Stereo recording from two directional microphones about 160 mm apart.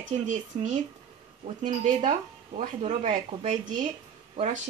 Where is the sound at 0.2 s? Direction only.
50° right (ahead or behind).